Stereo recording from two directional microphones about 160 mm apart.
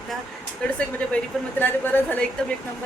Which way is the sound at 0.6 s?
10° left (ahead or behind).